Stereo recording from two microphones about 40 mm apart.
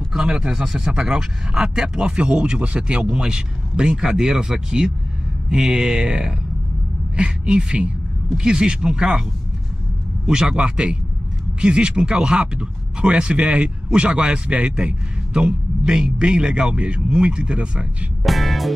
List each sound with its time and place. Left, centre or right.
0.1 s speech: centre
18.2 s music: centre